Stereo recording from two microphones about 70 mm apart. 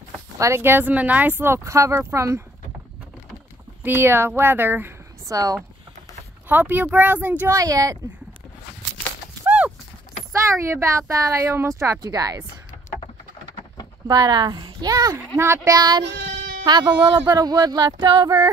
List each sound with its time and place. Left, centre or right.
0.4 s speech: right
2.0 s speech: right
3.8 s speech: right
5.2 s speech: right
6.5 s speech: right
7.4 s speech: right
10.7 s speech: right
12.0 s speech: right
14.0 s speech: right
15.3 s speech: right
15.7 s speech: right
16.6 s speech: right